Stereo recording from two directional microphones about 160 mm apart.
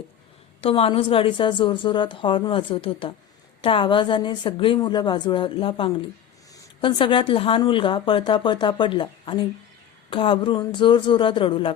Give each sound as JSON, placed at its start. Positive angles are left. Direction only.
{"t": 0.6, "sound": "a woman's voice", "side_deg": 35}